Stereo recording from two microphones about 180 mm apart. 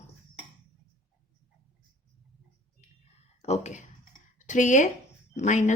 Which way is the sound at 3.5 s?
40° left (ahead or behind).